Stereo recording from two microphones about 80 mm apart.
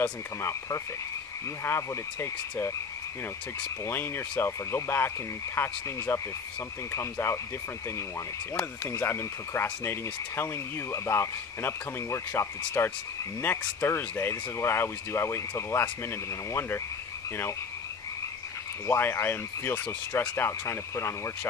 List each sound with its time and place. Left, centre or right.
0.0 s speech: left
3.8 s speech: left
8.5 s speech: left
18.9 s speech: left